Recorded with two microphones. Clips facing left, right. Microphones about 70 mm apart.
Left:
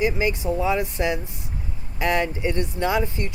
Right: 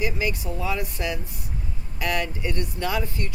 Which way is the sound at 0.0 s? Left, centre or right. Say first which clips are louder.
Left 4 dB; left.